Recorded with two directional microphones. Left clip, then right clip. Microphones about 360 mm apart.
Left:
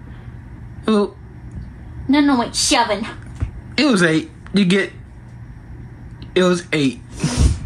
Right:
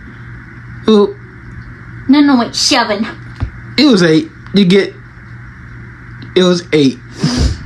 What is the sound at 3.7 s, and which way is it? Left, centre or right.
Speech, centre.